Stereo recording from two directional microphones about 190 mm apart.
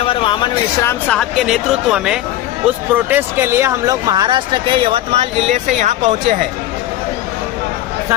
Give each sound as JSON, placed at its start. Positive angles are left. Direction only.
{"t": 0.0, "sound": "speech", "side_deg": 25}